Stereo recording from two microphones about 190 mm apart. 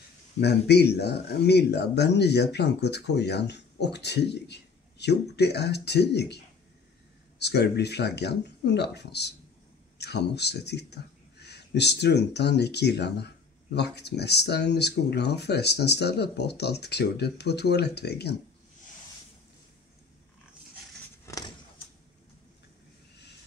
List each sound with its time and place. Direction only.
0.4 s speech: 60° left (ahead or behind)